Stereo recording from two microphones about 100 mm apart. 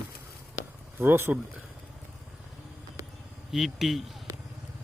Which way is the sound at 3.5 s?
Centre (ahead or behind).